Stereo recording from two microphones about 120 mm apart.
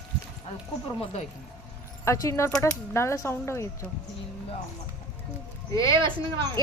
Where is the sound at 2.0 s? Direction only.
25° left (ahead or behind).